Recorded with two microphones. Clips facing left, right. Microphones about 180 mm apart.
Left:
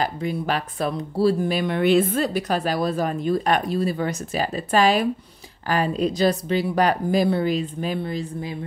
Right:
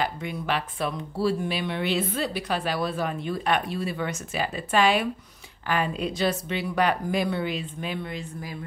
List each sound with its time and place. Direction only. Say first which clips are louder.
0.0 s speech: left 4 dB; 35° left (ahead or behind)